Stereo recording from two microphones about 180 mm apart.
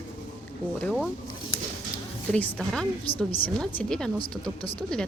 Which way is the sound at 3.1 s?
30° left (ahead or behind).